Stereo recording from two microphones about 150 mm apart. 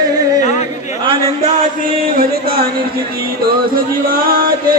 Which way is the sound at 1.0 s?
40° right (ahead or behind).